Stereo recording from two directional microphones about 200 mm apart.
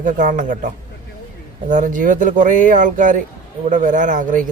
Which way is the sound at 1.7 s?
40° right (ahead or behind).